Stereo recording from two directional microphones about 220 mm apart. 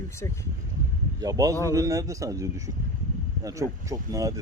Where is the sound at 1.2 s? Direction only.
15° right (ahead or behind).